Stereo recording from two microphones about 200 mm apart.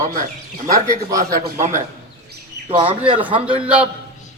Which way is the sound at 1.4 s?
40° right (ahead or behind).